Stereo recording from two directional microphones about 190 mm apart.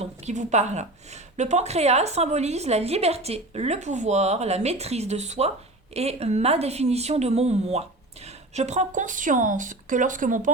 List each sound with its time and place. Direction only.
0.0 s a woman's voice: 35° right (ahead or behind)